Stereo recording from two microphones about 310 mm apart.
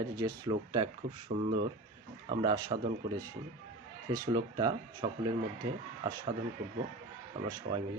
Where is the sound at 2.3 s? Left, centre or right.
Centre.